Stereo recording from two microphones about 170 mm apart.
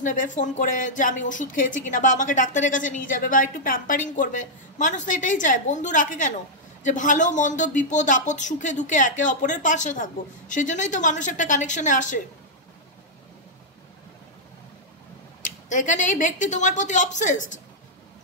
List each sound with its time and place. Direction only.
0.0 s speech: 50° left (ahead or behind)
15.4 s speech: 50° left (ahead or behind)